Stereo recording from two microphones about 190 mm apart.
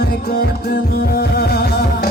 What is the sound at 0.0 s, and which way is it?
Music, 55° left (ahead or behind).